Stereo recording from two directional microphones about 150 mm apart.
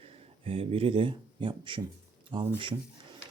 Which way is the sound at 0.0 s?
40° right (ahead or behind).